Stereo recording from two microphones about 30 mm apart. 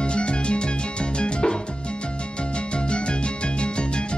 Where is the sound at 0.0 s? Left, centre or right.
Left.